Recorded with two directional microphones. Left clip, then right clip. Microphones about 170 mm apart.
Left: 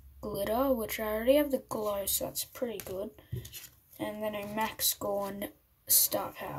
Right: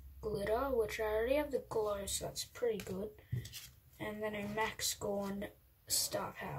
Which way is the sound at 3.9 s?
35° left (ahead or behind).